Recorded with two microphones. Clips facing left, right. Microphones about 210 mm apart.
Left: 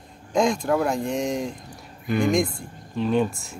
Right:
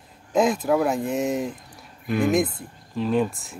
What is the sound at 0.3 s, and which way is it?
Speech, 5° right (ahead or behind).